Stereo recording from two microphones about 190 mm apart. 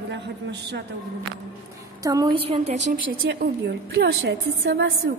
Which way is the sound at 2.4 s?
35° right (ahead or behind).